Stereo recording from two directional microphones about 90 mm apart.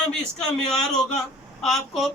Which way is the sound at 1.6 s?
5° left (ahead or behind).